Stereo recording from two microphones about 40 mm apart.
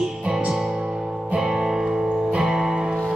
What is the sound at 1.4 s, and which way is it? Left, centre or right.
Music, centre.